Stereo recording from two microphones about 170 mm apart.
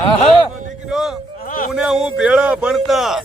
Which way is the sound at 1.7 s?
5° right (ahead or behind).